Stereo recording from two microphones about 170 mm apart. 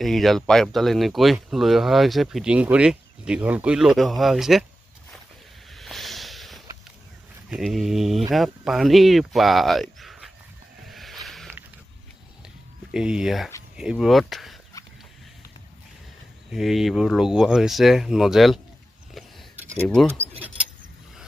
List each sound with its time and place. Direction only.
0.0 s speech: centre (ahead or behind)
5.8 s snort: centre (ahead or behind)
7.4 s speech: centre (ahead or behind)
10.9 s a sound: centre (ahead or behind)
12.9 s speech: 5° right (ahead or behind)
16.5 s speech: centre (ahead or behind)
19.5 s a sound: 10° right (ahead or behind)
19.8 s speech: 5° left (ahead or behind)